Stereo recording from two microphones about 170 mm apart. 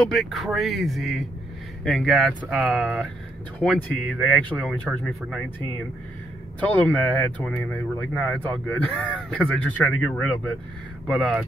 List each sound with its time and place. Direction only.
0.0 s speech: centre (ahead or behind)
6.6 s speech: 10° left (ahead or behind)